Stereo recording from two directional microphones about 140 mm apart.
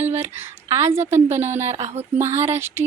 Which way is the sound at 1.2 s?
15° right (ahead or behind).